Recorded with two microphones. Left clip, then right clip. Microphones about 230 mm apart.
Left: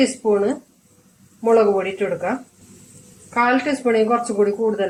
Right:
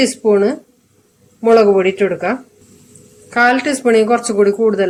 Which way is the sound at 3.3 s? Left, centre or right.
Right.